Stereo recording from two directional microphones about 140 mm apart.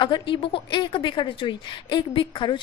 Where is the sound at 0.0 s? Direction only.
35° left (ahead or behind).